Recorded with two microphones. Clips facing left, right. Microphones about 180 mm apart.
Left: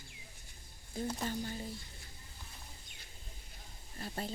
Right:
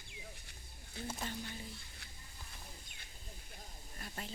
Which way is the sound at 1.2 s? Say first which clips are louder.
Left 5 dB; 40° left (ahead or behind).